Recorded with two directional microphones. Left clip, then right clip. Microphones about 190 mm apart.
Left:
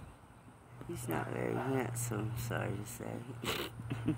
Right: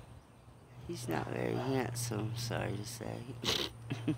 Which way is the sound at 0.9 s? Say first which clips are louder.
Right 1 dB; 15° right (ahead or behind).